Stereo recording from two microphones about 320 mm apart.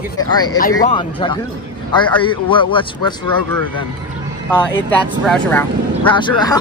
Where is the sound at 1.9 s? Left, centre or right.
Centre.